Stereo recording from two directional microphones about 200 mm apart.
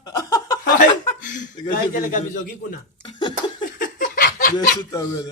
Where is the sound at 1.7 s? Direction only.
40° left (ahead or behind).